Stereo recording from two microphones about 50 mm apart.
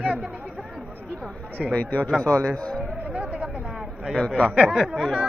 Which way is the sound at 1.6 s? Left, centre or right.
Centre.